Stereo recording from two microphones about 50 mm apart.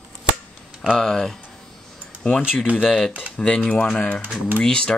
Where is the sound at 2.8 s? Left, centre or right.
Centre.